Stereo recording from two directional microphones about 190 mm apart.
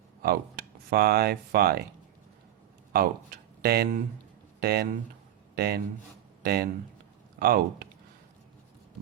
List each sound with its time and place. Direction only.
0.2 s speech: 55° right (ahead or behind)
2.9 s speech: 55° right (ahead or behind)